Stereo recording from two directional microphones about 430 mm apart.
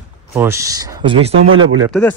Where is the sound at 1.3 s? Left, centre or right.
Right.